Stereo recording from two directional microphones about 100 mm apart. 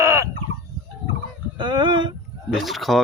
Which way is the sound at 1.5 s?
50° right (ahead or behind).